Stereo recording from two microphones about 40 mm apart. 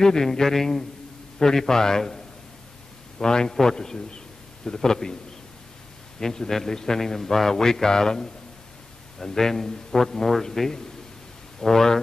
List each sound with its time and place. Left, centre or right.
0.0 s a man's voice: centre
6.1 s a man's voice: centre